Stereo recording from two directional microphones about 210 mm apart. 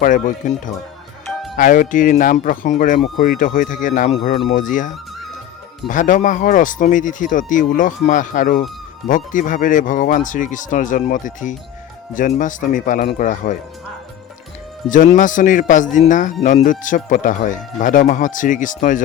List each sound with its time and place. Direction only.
0.0 s speech: 40° left (ahead or behind)
5.9 s speech: 40° left (ahead or behind)
14.8 s speech: 40° left (ahead or behind)